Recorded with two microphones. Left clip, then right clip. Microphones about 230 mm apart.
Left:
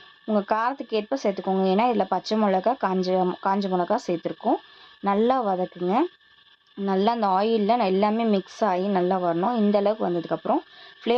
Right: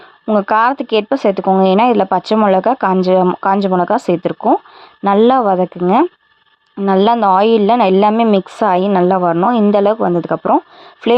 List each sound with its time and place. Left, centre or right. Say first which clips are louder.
0.3 s speech: right 12 dB; right